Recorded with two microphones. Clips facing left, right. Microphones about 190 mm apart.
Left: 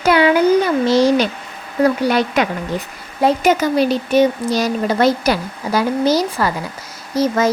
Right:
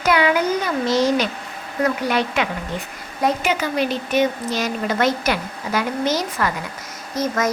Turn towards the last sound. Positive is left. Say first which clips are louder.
# left 5 dB
turn(degrees=30)  # may be behind; listen again after turning